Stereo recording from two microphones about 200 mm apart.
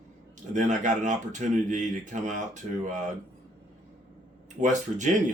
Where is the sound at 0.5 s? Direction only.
40° right (ahead or behind).